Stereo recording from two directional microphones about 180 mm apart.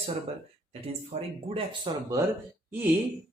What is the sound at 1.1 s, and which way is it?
Speech, 40° right (ahead or behind).